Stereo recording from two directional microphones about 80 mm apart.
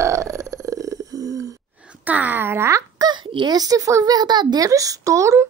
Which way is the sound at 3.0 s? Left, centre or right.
Right.